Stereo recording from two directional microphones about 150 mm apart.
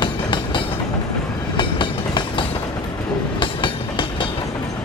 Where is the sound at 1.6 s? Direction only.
30° left (ahead or behind).